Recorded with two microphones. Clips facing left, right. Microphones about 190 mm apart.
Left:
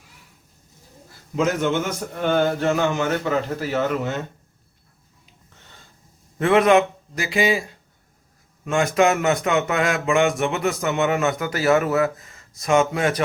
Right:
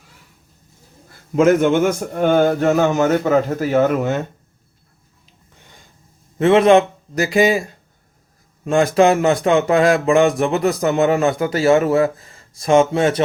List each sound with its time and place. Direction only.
1.4 s a man's voice: 55° right (ahead or behind)
6.4 s a man's voice: 25° right (ahead or behind)
7.2 s a man's voice: 45° right (ahead or behind)
8.6 s speech: 35° right (ahead or behind)